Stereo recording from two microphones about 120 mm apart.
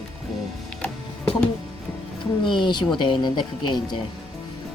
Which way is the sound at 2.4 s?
40° left (ahead or behind).